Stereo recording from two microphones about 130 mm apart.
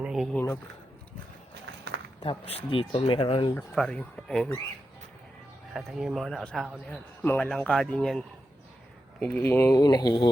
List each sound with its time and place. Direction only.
0.0 s a sound: 5° right (ahead or behind)
2.2 s speech: 50° left (ahead or behind)
3.8 s speech: 5° left (ahead or behind)
5.7 s speech: 5° right (ahead or behind)
9.2 s speech: 15° left (ahead or behind)
9.7 s speech: 30° left (ahead or behind)